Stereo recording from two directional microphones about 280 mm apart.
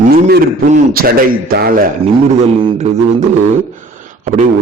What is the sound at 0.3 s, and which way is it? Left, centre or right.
A man's voice, right.